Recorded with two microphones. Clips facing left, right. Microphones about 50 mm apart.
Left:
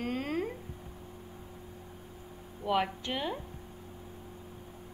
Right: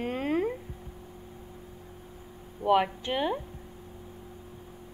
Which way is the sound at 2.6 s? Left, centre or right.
Centre.